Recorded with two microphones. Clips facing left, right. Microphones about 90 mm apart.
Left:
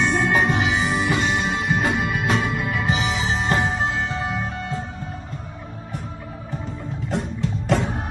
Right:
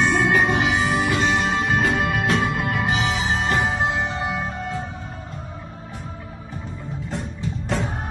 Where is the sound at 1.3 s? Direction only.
90° right.